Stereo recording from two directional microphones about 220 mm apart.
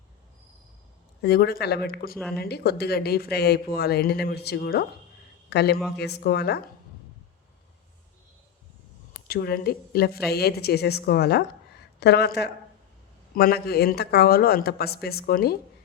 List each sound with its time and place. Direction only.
1.2 s speech: 45° left (ahead or behind)
9.2 s speech: 45° left (ahead or behind)